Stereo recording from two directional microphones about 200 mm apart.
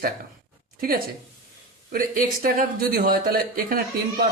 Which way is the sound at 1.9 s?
45° right (ahead or behind).